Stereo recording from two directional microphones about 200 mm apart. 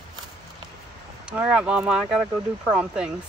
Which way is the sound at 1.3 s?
5° right (ahead or behind).